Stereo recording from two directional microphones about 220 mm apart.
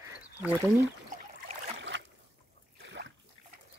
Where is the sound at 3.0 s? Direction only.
55° right (ahead or behind).